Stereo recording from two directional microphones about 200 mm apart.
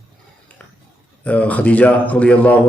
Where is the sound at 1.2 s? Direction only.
5° left (ahead or behind).